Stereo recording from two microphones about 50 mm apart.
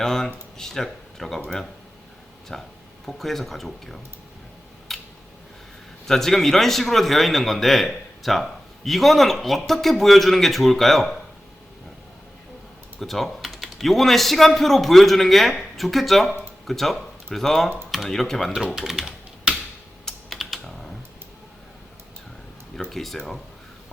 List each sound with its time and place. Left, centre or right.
0.0 s speech: centre
2.5 s a man's voice: centre
4.9 s a sound: centre
6.1 s a man's voice: centre
13.0 s a man's voice: centre
18.5 s speech: centre
19.5 s tick-tock: right
20.3 s typing: centre
22.8 s a man's voice: centre